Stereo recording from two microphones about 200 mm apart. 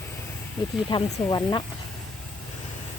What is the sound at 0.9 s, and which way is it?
Speech, 20° left (ahead or behind).